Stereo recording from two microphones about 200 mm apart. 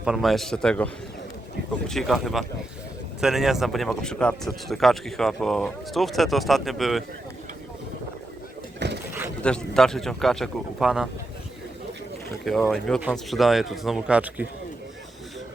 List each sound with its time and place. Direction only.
0.0 s speech: centre (ahead or behind)
1.9 s speech: centre (ahead or behind)
8.8 s boat: 60° right (ahead or behind)
9.4 s speech: 5° left (ahead or behind)
12.5 s speech: centre (ahead or behind)